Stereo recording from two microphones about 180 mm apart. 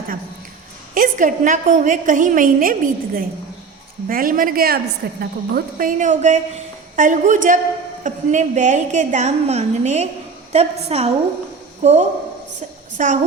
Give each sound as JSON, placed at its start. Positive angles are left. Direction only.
{"t": 0.9, "sound": "a woman's voice", "side_deg": -50}